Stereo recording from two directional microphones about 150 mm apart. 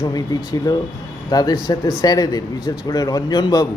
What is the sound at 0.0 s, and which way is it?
Speech, 25° left (ahead or behind).